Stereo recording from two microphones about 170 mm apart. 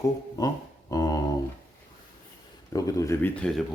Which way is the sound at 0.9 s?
20° left (ahead or behind).